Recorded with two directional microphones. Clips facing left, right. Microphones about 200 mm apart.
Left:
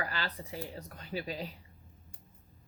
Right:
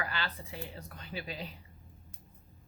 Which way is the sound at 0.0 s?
40° left (ahead or behind).